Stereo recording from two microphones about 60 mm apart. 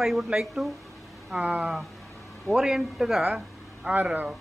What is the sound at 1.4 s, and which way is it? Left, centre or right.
Speech, right.